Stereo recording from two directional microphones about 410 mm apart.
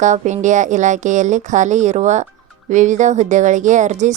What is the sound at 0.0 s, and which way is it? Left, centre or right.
A woman's voice, centre.